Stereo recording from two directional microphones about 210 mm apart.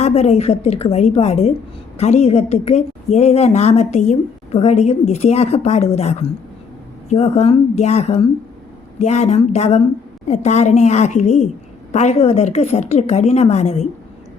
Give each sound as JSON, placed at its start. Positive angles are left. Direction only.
{"t": 0.0, "sound": "a woman's voice", "side_deg": 30}